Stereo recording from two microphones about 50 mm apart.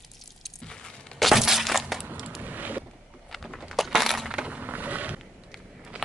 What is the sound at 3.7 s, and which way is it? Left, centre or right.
Crushing, centre.